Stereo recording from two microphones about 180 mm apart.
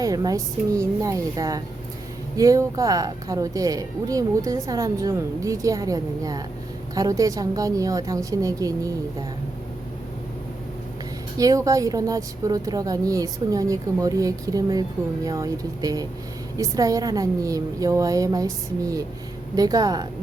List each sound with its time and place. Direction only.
0.0 s speech: 20° right (ahead or behind)
11.3 s speech: 20° right (ahead or behind)